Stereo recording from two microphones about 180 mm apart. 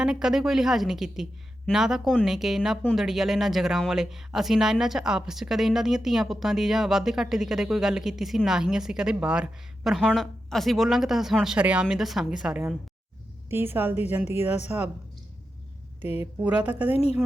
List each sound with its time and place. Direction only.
0.0 s a woman's voice: 5° right (ahead or behind)
16.0 s a woman's voice: 35° left (ahead or behind)
16.2 s a woman's voice: 10° right (ahead or behind)
16.9 s a woman's voice: 35° left (ahead or behind)